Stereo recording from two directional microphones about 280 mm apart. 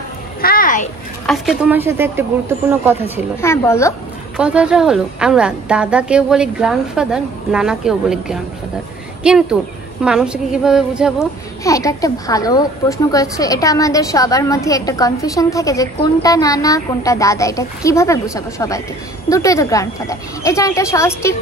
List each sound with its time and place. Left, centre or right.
0.4 s a sound: left
1.2 s a woman's voice: centre
3.3 s a woman's voice: centre
4.4 s a woman's voice: centre
11.6 s a woman's voice: centre